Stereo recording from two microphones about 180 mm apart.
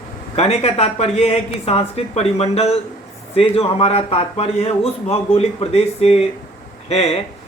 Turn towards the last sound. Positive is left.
turn(degrees=35)  # may be behind; listen again after turning